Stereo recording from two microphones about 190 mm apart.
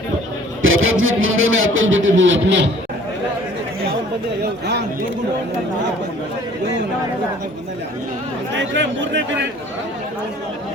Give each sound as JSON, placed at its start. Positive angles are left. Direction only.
{"t": 0.6, "sound": "speech", "side_deg": -90}
{"t": 8.5, "sound": "speech", "side_deg": -75}